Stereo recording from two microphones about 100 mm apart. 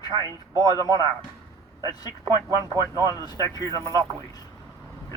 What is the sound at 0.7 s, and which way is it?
Speech, 40° right (ahead or behind).